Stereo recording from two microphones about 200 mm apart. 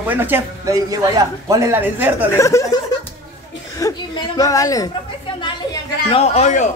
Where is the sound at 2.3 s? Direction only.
15° left (ahead or behind).